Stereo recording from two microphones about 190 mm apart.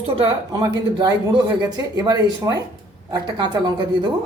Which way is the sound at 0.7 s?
25° right (ahead or behind).